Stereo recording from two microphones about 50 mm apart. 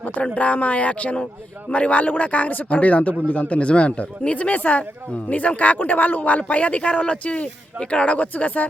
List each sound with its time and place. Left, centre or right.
0.3 s speech: left